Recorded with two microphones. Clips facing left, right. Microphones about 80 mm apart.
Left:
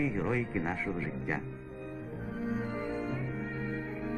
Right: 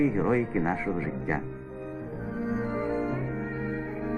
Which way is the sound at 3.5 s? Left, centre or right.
Right.